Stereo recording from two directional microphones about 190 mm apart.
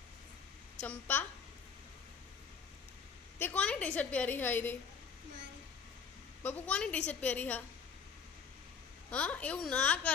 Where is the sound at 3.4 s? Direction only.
10° left (ahead or behind).